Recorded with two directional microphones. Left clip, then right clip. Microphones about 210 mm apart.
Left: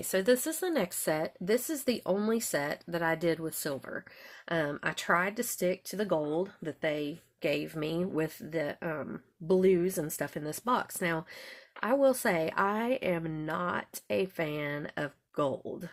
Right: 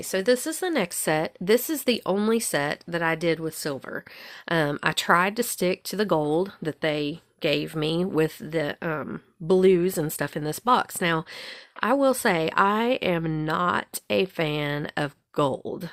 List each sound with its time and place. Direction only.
0.1 s speech: 20° right (ahead or behind); by 15.9 s 45° right (ahead or behind)